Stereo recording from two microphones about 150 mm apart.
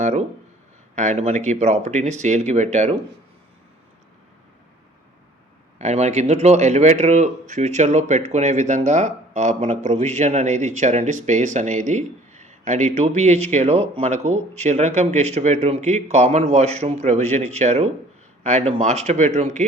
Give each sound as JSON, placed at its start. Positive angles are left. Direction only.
{"t": 0.0, "sound": "speech", "side_deg": -55}
{"t": 5.8, "sound": "speech", "side_deg": -50}